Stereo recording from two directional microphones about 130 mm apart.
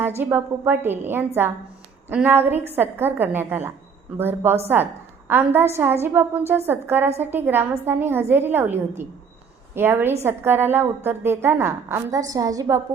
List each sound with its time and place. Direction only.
0.2 s a woman's voice: 15° right (ahead or behind)
5.5 s a woman's voice: 20° right (ahead or behind)